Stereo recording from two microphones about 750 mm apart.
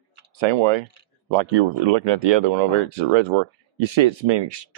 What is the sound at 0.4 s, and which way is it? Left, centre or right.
Speech, right.